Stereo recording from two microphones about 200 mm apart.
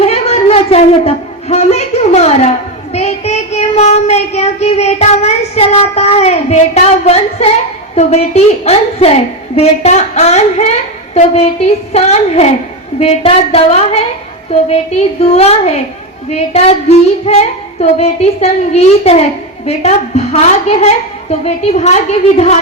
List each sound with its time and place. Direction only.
0.0 s a sound: 30° left (ahead or behind)
2.9 s child singing: 30° left (ahead or behind)
7.9 s a woman's voice: 30° left (ahead or behind)
15.2 s a woman's voice: 30° left (ahead or behind)